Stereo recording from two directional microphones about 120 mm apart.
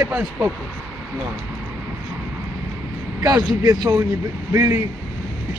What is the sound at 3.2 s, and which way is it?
A man's voice, 30° right (ahead or behind).